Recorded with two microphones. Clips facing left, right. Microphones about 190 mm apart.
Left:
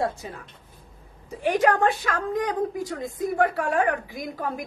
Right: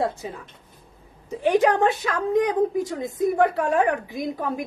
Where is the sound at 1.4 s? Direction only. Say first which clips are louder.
Right 2 dB; 25° right (ahead or behind).